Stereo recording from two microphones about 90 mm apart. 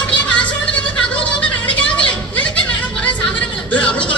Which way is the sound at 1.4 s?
15° left (ahead or behind).